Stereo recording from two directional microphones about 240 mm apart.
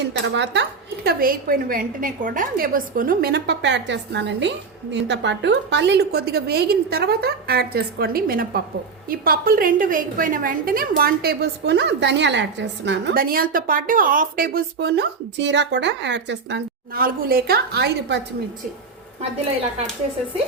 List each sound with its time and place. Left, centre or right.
0.0 s a woman's voice: right